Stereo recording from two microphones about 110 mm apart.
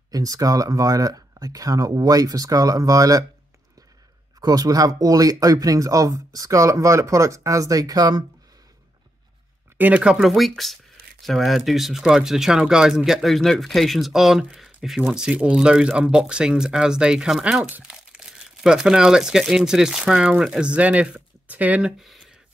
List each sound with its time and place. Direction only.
0.1 s speech: 35° right (ahead or behind)
4.4 s speech: 35° right (ahead or behind)
9.8 s speech: 15° right (ahead or behind)